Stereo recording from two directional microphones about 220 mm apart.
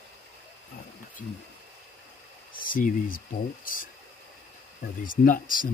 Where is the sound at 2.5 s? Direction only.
40° left (ahead or behind).